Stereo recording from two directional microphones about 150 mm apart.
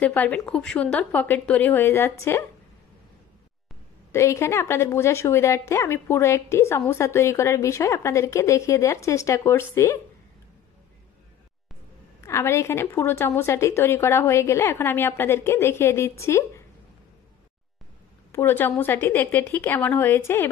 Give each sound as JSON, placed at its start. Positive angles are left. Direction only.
{"t": 0.0, "sound": "a woman's voice", "side_deg": 10}
{"t": 4.1, "sound": "a woman's voice", "side_deg": 20}
{"t": 12.2, "sound": "a woman's voice", "side_deg": 20}
{"t": 18.3, "sound": "a woman's voice", "side_deg": 15}